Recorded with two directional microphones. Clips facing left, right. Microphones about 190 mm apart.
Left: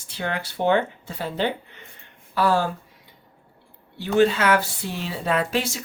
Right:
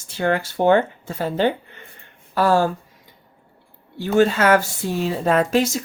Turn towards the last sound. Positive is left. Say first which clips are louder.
# right 6 dB
turn(degrees=-45)  # may be behind; listen again after turning